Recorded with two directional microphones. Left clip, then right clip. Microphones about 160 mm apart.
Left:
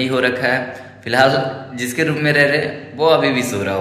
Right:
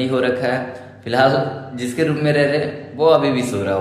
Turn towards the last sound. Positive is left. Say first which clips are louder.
# even
turn(degrees=-10)  # may be behind; listen again after turning